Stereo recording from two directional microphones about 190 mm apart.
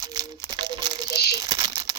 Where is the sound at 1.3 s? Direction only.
20° right (ahead or behind).